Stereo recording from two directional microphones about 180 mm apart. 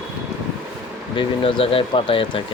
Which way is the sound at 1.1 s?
30° left (ahead or behind).